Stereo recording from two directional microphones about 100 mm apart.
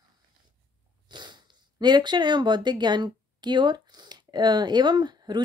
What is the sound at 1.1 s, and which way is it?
Speech, 50° right (ahead or behind).